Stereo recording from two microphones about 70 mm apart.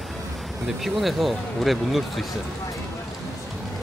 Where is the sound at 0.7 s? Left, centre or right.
Centre.